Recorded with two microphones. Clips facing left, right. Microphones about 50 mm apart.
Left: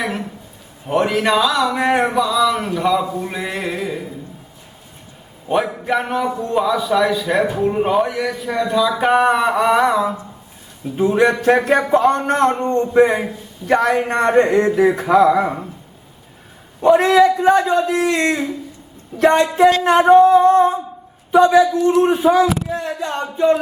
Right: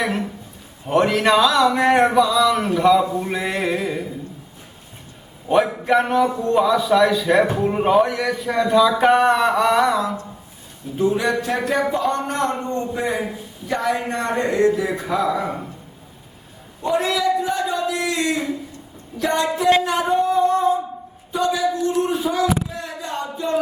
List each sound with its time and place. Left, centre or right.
0.0 s a man's voice: centre
5.5 s a man's voice: centre
11.1 s a man's voice: left
13.7 s a man's voice: left
16.8 s a man's voice: left
22.1 s a sound: left